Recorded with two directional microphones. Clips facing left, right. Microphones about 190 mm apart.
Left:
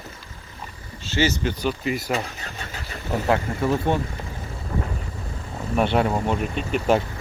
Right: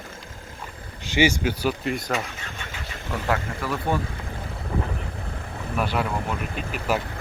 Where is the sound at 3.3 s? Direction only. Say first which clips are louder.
Left 5 dB; 25° left (ahead or behind).